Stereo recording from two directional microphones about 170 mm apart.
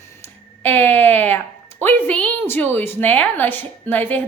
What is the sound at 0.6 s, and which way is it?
A woman's voice, 10° left (ahead or behind).